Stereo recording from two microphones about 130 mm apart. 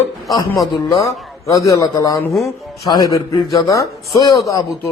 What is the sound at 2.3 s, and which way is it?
Speech, centre (ahead or behind).